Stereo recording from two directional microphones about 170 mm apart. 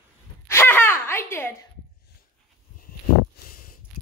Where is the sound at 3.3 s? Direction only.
60° left (ahead or behind).